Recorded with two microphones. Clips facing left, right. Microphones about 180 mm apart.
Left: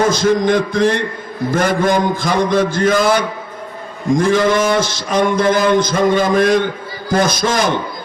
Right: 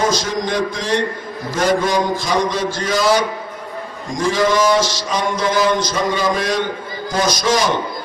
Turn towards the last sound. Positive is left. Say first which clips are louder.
# left 1 dB
turn(degrees=55)  # may be behind; listen again after turning